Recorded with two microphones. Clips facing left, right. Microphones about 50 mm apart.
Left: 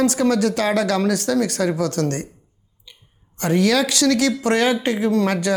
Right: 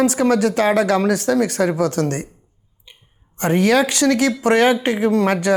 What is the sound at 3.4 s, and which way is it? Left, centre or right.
Speech, right.